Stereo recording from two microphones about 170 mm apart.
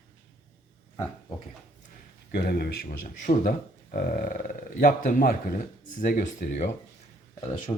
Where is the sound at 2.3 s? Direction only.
70° left (ahead or behind); by 6.6 s 50° left (ahead or behind).